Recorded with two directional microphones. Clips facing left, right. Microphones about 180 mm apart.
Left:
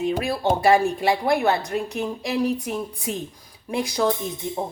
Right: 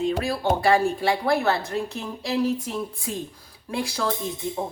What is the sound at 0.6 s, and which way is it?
A woman's voice, 20° left (ahead or behind).